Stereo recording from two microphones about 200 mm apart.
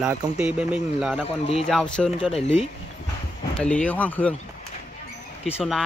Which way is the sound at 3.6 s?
5° left (ahead or behind).